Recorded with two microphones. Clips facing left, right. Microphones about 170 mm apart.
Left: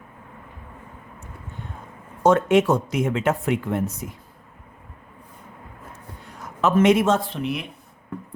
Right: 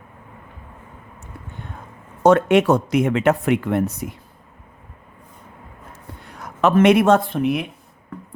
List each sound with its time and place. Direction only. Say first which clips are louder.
2.2 s speech: right 3 dB; 70° right (ahead or behind)
6.2 s speech: right 4 dB; 70° right (ahead or behind); by 7.7 s 55° right (ahead or behind)